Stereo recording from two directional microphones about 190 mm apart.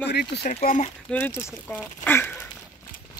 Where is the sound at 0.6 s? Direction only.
45° left (ahead or behind).